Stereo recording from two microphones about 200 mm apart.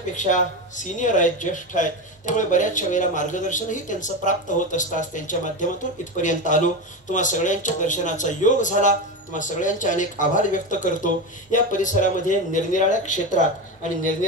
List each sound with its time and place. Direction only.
0.1 s speech: 40° left (ahead or behind)